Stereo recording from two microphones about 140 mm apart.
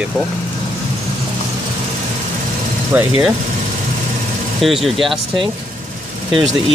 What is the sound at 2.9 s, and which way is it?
Speech, 15° right (ahead or behind).